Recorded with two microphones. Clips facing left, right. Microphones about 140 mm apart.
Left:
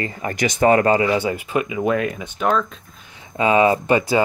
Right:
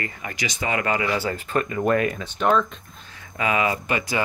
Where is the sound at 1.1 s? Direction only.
15° left (ahead or behind).